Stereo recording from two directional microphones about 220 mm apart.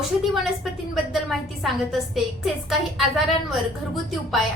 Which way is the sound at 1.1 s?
Centre (ahead or behind).